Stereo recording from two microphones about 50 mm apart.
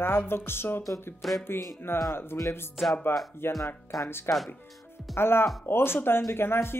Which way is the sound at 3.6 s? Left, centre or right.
Left.